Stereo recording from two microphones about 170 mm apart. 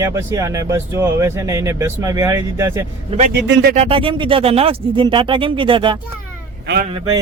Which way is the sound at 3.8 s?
35° right (ahead or behind).